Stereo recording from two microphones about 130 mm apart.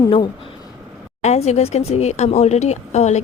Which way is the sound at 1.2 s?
55° left (ahead or behind).